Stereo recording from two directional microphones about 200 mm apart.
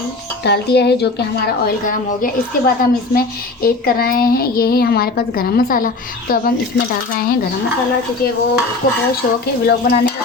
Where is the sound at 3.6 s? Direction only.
50° left (ahead or behind).